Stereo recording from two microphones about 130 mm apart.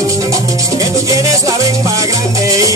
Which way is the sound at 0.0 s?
25° right (ahead or behind).